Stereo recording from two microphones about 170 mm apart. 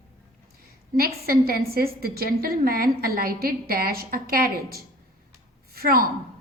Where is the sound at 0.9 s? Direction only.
60° right (ahead or behind).